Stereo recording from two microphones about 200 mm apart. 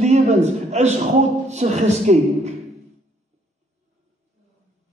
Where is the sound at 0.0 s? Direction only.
35° right (ahead or behind).